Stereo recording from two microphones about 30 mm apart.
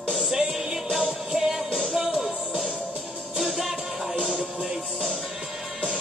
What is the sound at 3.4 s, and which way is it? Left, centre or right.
Music, centre.